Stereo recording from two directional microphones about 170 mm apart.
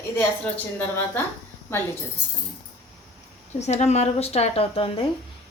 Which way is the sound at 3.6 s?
40° left (ahead or behind).